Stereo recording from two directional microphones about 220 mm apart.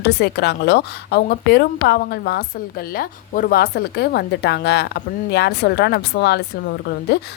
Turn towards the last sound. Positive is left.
turn(degrees=50)  # may be behind; listen again after turning